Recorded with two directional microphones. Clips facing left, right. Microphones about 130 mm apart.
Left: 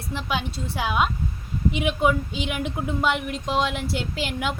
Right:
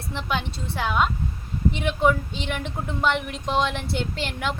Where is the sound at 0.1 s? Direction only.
5° left (ahead or behind).